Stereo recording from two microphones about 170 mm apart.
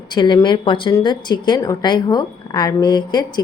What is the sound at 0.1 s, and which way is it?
A woman's voice, 25° left (ahead or behind).